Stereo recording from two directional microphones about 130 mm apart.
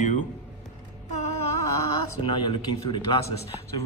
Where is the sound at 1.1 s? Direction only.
55° left (ahead or behind).